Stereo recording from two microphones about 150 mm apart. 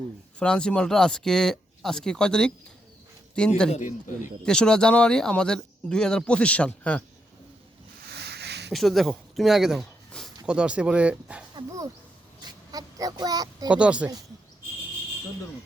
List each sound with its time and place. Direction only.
0.3 s speech: 5° left (ahead or behind)
3.7 s speech: 55° left (ahead or behind)
4.4 s speech: 5° left (ahead or behind)
8.1 s a sound: 90° right
8.7 s speech: centre (ahead or behind)
11.5 s speech: 20° right (ahead or behind)
12.4 s a sound: 25° right (ahead or behind)
13.7 s speech: 5° right (ahead or behind)